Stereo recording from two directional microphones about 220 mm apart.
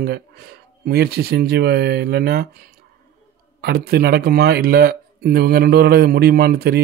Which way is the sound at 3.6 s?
45° right (ahead or behind).